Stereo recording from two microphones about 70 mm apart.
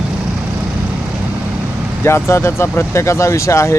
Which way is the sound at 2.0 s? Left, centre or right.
Left.